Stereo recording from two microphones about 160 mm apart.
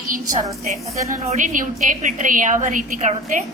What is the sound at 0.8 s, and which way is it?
A woman's voice, 40° right (ahead or behind).